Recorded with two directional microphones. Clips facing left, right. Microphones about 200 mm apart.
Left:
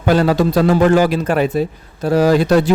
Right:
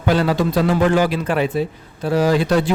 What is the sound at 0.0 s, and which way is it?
A man's voice, 45° left (ahead or behind).